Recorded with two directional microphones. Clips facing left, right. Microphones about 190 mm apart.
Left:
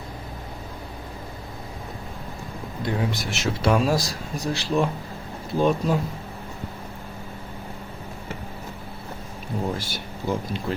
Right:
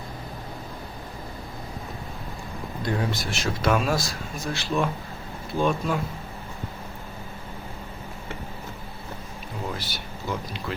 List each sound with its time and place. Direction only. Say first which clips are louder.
2.8 s speech: left 1 dB; 20° left (ahead or behind); by 6.0 s 35° left (ahead or behind)
9.7 s speech: left 3 dB; 50° left (ahead or behind)